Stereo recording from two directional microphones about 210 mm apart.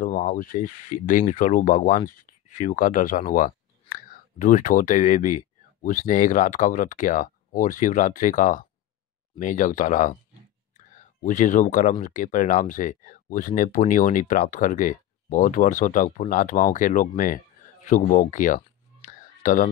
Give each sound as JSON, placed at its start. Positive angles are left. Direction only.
{"t": 0.0, "sound": "speech", "side_deg": 40}
{"t": 11.2, "sound": "speech", "side_deg": 35}
{"t": 18.9, "sound": "a sound", "side_deg": 40}